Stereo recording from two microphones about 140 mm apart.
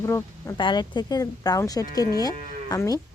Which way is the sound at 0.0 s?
20° left (ahead or behind).